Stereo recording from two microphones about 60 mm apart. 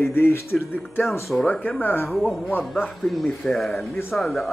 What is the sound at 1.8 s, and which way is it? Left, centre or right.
Speech, left.